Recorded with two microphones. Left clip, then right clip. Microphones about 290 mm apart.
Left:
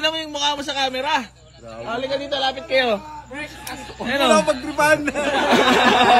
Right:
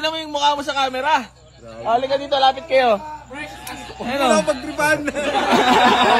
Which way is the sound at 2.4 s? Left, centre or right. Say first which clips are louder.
Right 4 dB; centre.